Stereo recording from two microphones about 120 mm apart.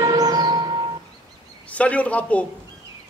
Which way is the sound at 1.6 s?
10° left (ahead or behind).